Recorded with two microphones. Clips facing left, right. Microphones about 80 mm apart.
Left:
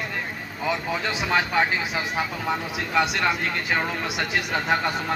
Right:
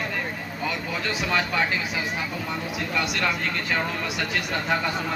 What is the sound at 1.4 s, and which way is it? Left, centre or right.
Speech, left.